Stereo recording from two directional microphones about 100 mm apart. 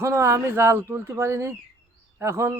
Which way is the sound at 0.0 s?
30° right (ahead or behind).